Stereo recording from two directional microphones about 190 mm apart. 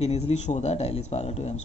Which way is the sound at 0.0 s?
35° left (ahead or behind).